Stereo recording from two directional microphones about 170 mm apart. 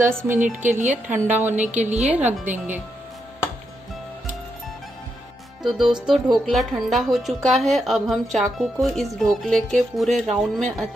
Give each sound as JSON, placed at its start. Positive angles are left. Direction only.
{"t": 0.2, "sound": "a woman's voice", "side_deg": -10}
{"t": 0.6, "sound": "a woman's voice", "side_deg": -45}
{"t": 1.0, "sound": "a woman's voice", "side_deg": -10}
{"t": 1.8, "sound": "a woman's voice", "side_deg": -40}
{"t": 2.0, "sound": "a woman's voice", "side_deg": -10}
{"t": 5.6, "sound": "music", "side_deg": 0}